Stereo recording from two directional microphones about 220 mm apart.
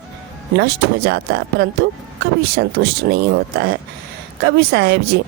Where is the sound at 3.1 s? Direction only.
45° right (ahead or behind).